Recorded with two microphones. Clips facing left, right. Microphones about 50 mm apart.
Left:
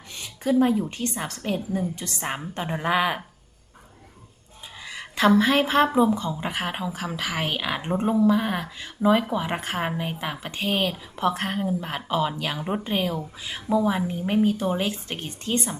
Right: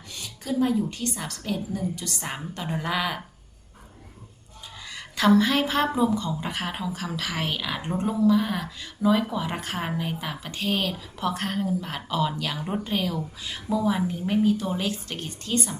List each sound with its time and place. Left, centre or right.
0.1 s a woman's voice: left
4.9 s a woman's voice: left